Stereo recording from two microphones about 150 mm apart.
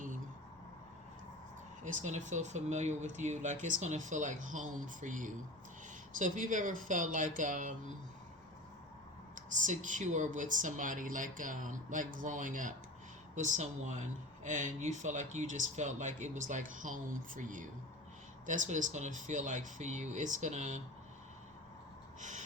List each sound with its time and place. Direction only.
1.8 s speech: 55° right (ahead or behind)
9.3 s speech: 55° right (ahead or behind)
22.2 s a sound: 55° right (ahead or behind)